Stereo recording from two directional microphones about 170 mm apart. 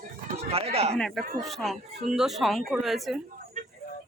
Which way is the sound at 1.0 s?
Centre (ahead or behind).